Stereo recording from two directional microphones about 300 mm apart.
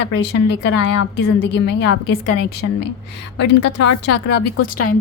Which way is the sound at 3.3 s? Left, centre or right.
Left.